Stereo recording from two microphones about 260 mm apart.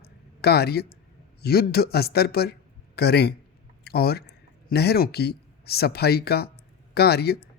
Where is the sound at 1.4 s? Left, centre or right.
Left.